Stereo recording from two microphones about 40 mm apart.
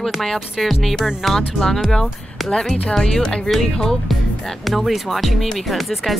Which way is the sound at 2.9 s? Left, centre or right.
Centre.